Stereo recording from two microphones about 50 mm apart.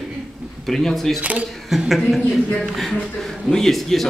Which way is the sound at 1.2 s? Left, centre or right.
Right.